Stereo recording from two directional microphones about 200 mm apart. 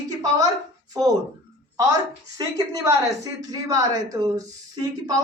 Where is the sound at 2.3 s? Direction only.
15° right (ahead or behind).